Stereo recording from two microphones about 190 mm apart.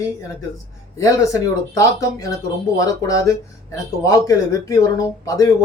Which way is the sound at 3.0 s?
15° left (ahead or behind).